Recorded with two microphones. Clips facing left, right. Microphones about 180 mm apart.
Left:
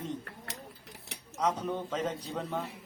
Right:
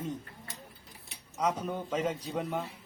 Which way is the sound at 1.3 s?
10° right (ahead or behind).